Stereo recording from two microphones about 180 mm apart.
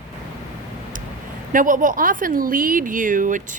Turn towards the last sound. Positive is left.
turn(degrees=-45)  # may be behind; listen again after turning